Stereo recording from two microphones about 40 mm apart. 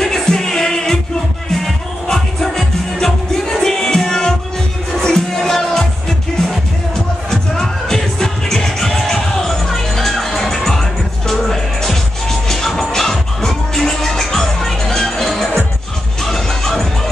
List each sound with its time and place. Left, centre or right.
0.0 s music: centre
2.0 s music: centre
7.2 s music: centre